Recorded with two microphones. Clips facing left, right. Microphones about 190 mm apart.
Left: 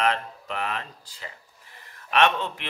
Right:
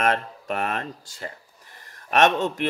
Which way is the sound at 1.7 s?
45° right (ahead or behind).